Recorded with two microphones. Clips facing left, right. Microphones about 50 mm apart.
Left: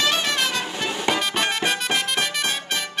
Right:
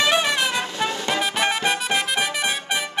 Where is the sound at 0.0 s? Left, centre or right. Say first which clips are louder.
Right 2 dB; centre.